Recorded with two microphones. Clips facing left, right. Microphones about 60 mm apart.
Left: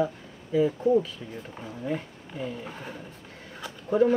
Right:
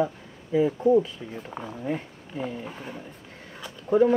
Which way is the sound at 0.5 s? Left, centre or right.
Right.